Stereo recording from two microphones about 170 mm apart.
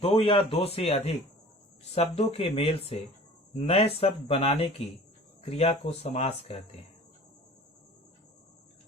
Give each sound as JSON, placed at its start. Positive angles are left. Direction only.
{"t": 0.0, "sound": "speech", "side_deg": 35}